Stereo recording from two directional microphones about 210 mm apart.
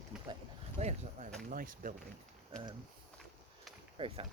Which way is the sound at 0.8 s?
35° right (ahead or behind).